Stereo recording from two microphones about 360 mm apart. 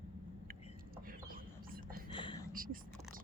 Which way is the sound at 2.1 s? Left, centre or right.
Centre.